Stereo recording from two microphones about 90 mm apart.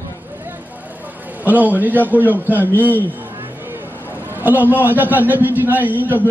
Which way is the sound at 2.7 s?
20° left (ahead or behind).